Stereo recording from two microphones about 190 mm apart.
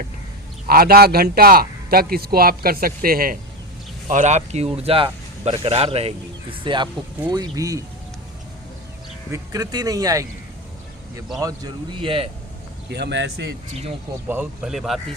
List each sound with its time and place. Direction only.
0.7 s a man's voice: 50° right (ahead or behind)
4.1 s speech: 40° right (ahead or behind); by 7.9 s 20° right (ahead or behind)
9.3 s a man's voice: 20° right (ahead or behind)
12.9 s speech: 65° right (ahead or behind)
14.3 s speech: 5° right (ahead or behind)